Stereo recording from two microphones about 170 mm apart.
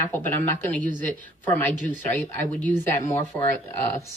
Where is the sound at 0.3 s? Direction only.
10° left (ahead or behind).